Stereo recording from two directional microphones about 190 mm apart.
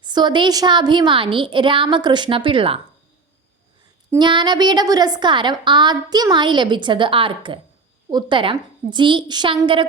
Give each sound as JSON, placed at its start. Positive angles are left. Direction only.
{"t": 0.0, "sound": "a woman's voice", "side_deg": -25}
{"t": 4.1, "sound": "a woman's voice", "side_deg": -25}